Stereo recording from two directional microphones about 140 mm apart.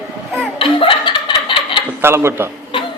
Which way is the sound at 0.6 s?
40° left (ahead or behind).